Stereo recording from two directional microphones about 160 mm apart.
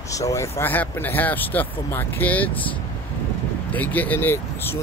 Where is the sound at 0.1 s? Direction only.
20° left (ahead or behind).